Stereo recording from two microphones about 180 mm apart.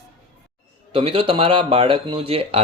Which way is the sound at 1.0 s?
30° right (ahead or behind).